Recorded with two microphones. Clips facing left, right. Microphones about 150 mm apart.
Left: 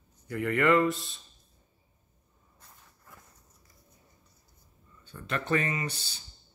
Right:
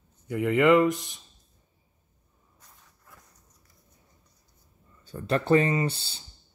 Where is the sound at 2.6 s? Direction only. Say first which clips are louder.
Left 1 dB; centre (ahead or behind).